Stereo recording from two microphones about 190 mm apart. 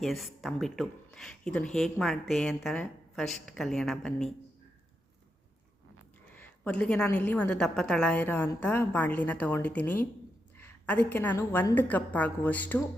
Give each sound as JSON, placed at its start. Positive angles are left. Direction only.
{"t": 0.0, "sound": "speech", "side_deg": 0}
{"t": 6.3, "sound": "a woman's voice", "side_deg": 5}